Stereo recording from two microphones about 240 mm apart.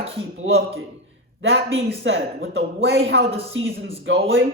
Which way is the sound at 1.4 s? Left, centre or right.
Right.